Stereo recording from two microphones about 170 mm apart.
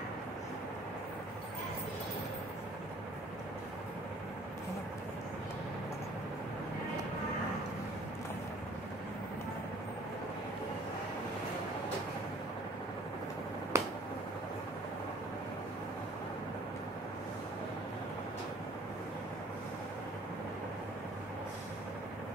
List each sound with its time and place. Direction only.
13.7 s finger snapping: 15° right (ahead or behind)